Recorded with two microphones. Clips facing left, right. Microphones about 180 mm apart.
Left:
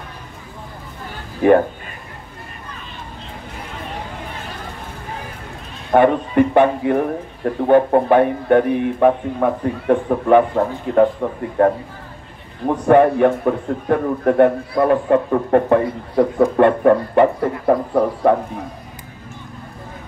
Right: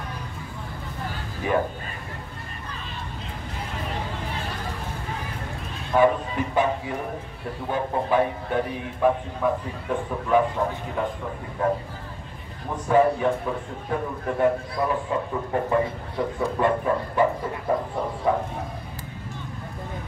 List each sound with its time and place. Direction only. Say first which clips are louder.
1.4 s a man's voice: left 13 dB; 60° left (ahead or behind)
5.9 s a man's voice: left 6 dB; 60° left (ahead or behind)